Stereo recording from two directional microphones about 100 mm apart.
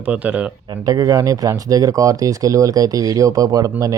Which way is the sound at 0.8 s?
35° right (ahead or behind).